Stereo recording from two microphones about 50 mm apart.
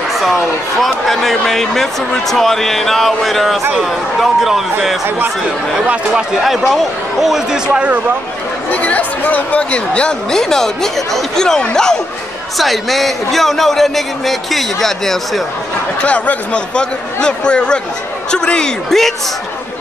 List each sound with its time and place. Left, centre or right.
0.1 s speech: centre
6.4 s a man's voice: centre; by 8.0 s right
8.6 s speech: left
10.3 s speech: centre
12.5 s speech: centre
16.0 s speech: left
18.9 s speech: centre